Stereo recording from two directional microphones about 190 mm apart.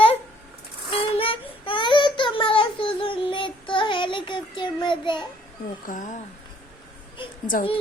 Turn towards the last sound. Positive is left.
turn(degrees=45)  # may be behind; listen again after turning